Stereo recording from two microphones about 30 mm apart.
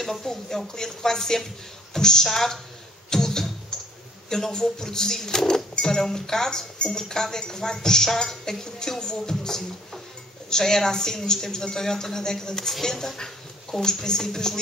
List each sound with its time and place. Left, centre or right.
0.0 s a woman's voice: centre
2.2 s a woman's voice: centre
3.1 s music: centre
3.7 s a sound: centre
4.5 s a woman's voice: left